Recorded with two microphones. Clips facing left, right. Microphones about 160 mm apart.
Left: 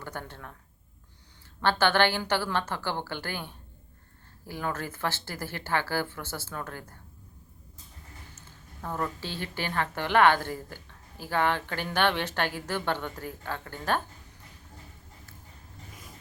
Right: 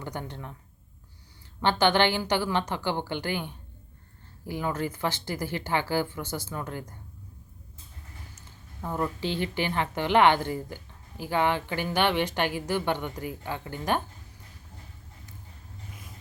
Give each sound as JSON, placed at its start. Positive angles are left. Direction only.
{"t": 0.0, "sound": "speech", "side_deg": -15}
{"t": 1.6, "sound": "speech", "side_deg": -15}
{"t": 8.4, "sound": "a woman's voice", "side_deg": -15}